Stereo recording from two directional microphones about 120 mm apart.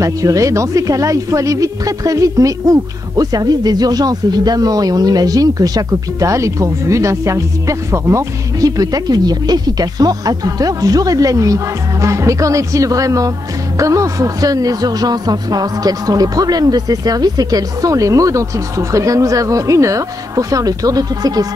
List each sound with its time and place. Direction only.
0.0 s speech: 25° right (ahead or behind)